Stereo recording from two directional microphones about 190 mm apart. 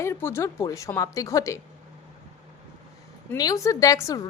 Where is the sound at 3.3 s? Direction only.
20° left (ahead or behind).